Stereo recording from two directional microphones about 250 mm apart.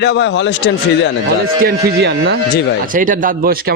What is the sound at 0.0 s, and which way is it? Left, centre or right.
Speech, left.